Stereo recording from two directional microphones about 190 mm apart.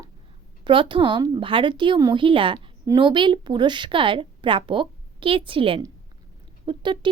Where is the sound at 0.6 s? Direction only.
25° right (ahead or behind).